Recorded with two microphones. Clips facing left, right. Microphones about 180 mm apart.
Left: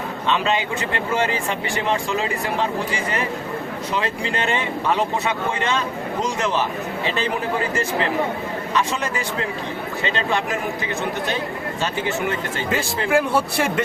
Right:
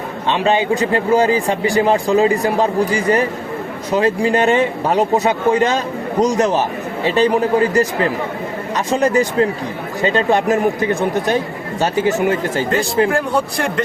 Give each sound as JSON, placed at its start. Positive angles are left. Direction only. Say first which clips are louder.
{"t": 0.3, "sound": "speech", "louder": "right 10 dB", "side_deg": -30}
{"t": 13.1, "sound": "a man's voice", "louder": "right 1 dB", "side_deg": 5}